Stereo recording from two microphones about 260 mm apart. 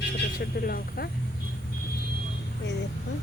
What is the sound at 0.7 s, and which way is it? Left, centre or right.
Speech, left.